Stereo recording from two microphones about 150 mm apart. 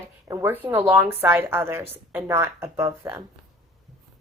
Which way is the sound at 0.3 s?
15° right (ahead or behind).